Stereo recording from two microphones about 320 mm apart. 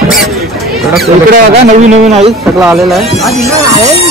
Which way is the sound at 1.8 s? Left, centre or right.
Centre.